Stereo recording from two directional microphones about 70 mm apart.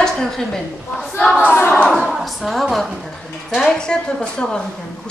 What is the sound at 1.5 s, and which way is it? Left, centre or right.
Speech, left.